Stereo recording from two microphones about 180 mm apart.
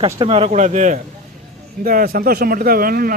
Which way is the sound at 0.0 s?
30° right (ahead or behind).